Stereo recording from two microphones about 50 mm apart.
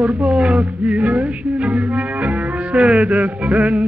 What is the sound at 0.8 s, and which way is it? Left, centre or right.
Music, right.